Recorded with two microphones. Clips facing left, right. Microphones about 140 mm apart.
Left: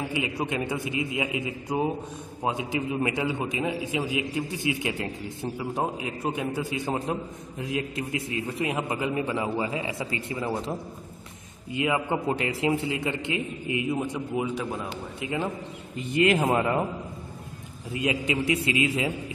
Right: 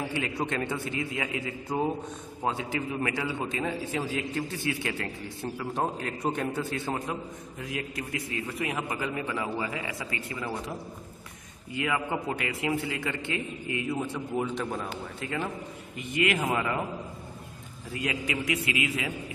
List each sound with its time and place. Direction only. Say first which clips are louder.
0.1 s a man's voice: left 2 dB; 15° left (ahead or behind)
7.6 s a man's voice: left 5 dB; 25° left (ahead or behind)
11.7 s a man's voice: left 4 dB; 20° left (ahead or behind)
16.0 s a man's voice: left 5 dB; 30° left (ahead or behind)
17.9 s a man's voice: left 5 dB; 25° left (ahead or behind)